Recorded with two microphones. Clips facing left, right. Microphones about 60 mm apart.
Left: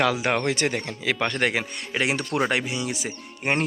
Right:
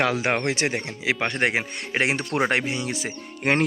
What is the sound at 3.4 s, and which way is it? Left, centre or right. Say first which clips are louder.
Speech: right 3 dB; right.